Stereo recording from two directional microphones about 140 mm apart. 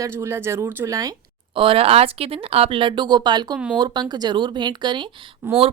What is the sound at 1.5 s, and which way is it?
Speech, 40° right (ahead or behind).